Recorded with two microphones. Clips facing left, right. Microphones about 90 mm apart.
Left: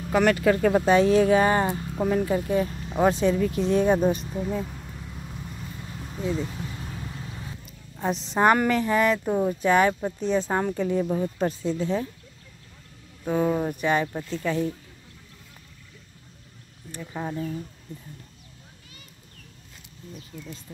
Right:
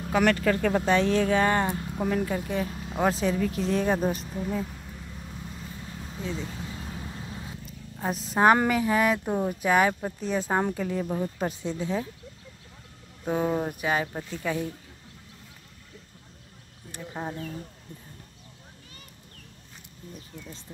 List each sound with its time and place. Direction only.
0.1 s speech: centre (ahead or behind)
0.4 s speech: 15° left (ahead or behind)
6.9 s vehicle: 5° right (ahead or behind)
8.0 s speech: 5° right (ahead or behind)
13.2 s speech: 10° right (ahead or behind)
16.9 s speech: 15° right (ahead or behind)
20.3 s speech: 25° right (ahead or behind)